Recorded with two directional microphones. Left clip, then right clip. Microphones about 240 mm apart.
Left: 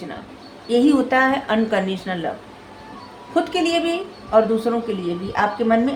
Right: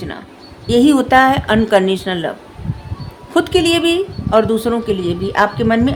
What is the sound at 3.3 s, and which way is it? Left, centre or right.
A woman's voice, right.